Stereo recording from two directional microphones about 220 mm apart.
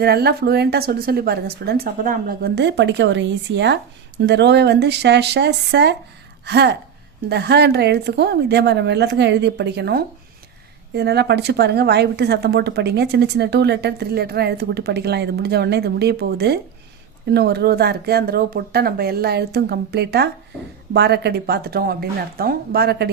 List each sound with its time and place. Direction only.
0.0 s speech: 45° right (ahead or behind)